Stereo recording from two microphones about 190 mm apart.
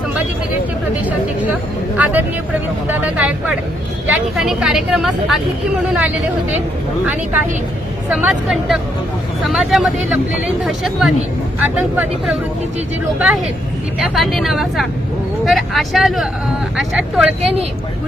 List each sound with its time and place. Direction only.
2.8 s a woman's voice: 10° right (ahead or behind)
7.0 s a woman's voice: 10° right (ahead or behind)